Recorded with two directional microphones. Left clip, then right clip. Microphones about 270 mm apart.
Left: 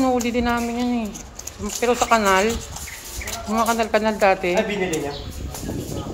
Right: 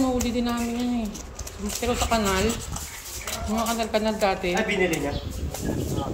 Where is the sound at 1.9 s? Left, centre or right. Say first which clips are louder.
Left 7 dB; left.